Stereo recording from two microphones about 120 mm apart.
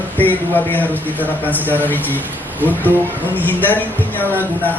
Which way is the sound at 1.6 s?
15° right (ahead or behind).